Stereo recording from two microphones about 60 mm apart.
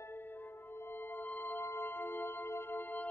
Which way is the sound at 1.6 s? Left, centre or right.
Left.